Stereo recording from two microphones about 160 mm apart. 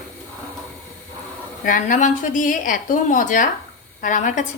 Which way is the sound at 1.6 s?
55° left (ahead or behind).